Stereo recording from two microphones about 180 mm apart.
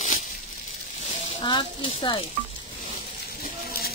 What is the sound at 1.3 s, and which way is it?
Speech, 25° left (ahead or behind).